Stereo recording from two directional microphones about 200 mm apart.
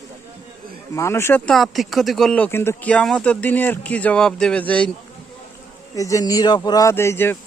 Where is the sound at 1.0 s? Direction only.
15° left (ahead or behind).